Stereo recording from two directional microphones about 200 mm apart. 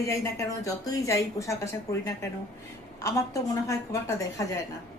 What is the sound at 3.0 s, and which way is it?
A woman's voice, 15° left (ahead or behind).